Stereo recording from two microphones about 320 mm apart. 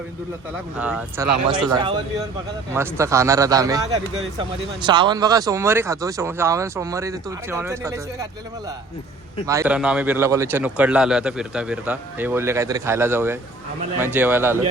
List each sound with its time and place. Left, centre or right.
0.8 s speech: centre
9.5 s speech: centre